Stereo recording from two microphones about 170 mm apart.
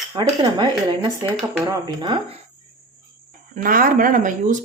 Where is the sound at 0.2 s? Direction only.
25° right (ahead or behind).